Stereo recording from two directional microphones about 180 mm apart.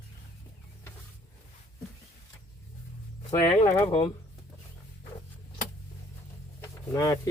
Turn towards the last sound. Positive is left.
turn(degrees=15)  # may be behind; listen again after turning